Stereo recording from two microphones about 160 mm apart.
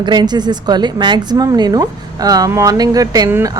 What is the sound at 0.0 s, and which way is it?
A woman's voice, 25° right (ahead or behind).